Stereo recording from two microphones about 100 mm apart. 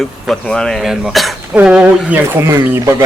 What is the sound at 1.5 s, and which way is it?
Speech, 10° right (ahead or behind).